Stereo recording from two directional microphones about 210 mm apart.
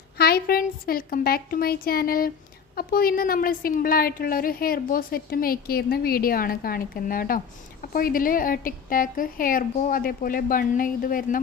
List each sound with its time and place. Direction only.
0.2 s a woman's voice: 45° left (ahead or behind)